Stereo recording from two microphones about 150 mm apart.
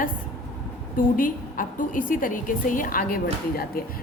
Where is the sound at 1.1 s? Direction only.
65° left (ahead or behind).